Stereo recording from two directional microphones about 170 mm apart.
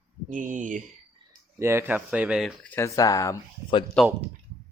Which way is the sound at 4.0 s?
5° left (ahead or behind).